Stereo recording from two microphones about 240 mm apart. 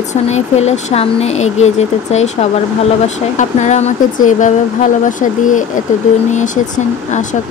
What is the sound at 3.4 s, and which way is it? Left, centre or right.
Speech, left.